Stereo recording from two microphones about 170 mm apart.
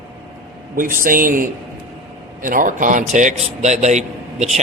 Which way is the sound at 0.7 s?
55° right (ahead or behind).